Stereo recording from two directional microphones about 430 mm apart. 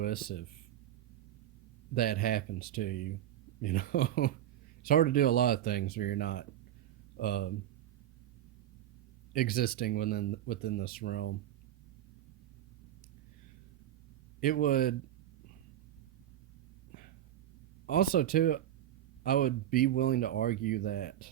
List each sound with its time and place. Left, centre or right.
0.0 s speech: left
1.9 s speech: centre
9.3 s speech: centre
14.4 s speech: centre
17.8 s speech: centre